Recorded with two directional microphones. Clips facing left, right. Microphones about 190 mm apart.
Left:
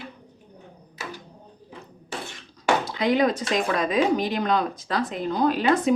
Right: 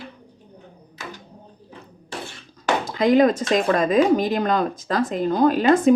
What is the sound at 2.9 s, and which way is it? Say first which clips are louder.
Speech: right 9 dB; 45° right (ahead or behind).